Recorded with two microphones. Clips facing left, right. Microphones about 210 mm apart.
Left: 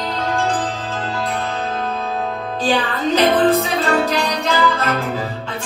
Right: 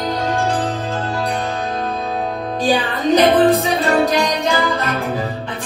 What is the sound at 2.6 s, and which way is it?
Music, 15° right (ahead or behind).